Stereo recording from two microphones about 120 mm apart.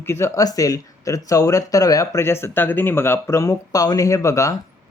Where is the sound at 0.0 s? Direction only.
20° left (ahead or behind).